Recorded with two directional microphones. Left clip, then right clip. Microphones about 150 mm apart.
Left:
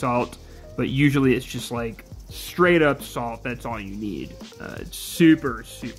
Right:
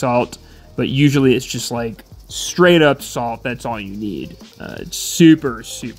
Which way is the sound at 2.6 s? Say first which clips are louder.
Right 6 dB; 40° right (ahead or behind).